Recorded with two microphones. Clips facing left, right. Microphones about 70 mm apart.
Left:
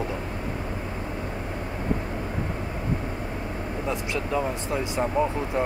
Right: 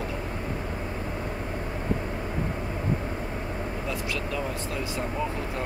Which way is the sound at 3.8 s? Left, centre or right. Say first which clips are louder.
Left 5 dB; left.